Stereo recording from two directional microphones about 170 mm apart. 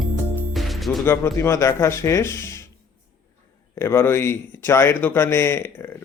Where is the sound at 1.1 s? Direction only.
15° left (ahead or behind).